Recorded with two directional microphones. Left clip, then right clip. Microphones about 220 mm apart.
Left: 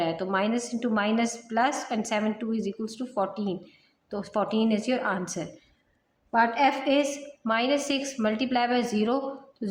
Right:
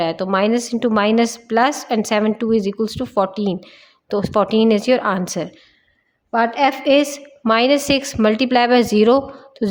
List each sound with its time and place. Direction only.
0.0 s a woman's voice: 50° right (ahead or behind)